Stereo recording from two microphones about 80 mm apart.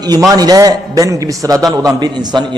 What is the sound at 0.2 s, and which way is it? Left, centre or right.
A man's voice, right.